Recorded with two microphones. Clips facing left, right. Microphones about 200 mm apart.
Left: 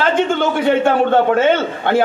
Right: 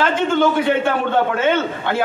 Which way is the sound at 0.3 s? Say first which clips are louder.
Left 1 dB; 50° left (ahead or behind).